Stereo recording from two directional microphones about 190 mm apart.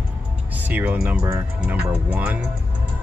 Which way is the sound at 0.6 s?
10° right (ahead or behind).